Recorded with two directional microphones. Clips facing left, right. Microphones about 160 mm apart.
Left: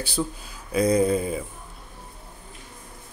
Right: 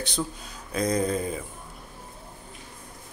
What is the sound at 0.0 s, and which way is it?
Speech, 5° left (ahead or behind).